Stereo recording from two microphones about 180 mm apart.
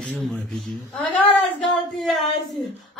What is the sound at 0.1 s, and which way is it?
A woman's voice, centre (ahead or behind).